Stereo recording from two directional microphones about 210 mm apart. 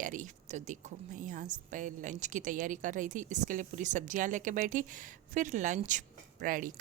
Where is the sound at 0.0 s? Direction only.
40° right (ahead or behind).